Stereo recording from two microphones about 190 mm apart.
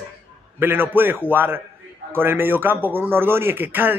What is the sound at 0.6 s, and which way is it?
A man's voice, 10° right (ahead or behind).